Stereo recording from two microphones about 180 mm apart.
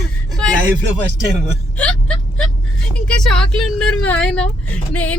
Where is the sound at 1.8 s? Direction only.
5° left (ahead or behind).